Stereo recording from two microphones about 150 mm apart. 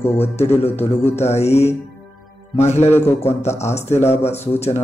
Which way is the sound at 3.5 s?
45° left (ahead or behind).